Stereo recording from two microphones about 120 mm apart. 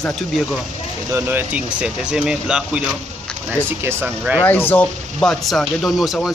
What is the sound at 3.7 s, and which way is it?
Speech, 20° right (ahead or behind).